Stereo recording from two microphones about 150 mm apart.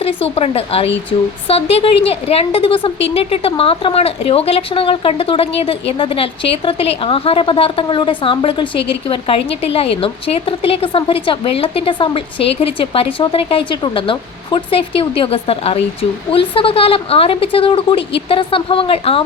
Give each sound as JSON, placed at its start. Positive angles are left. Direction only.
{"t": 0.0, "sound": "a woman's voice", "side_deg": 40}